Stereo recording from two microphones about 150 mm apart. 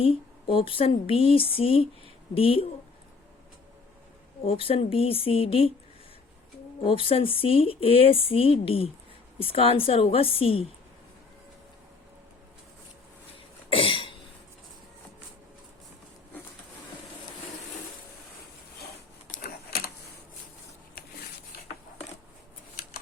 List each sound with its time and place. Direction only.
0.0 s speech: 40° left (ahead or behind)
4.4 s speech: 40° left (ahead or behind)
6.8 s speech: 40° left (ahead or behind)
13.7 s cough: 35° left (ahead or behind)
19.3 s a sound: 90° left